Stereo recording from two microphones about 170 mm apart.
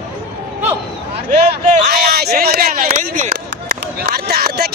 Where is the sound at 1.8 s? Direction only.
70° right (ahead or behind).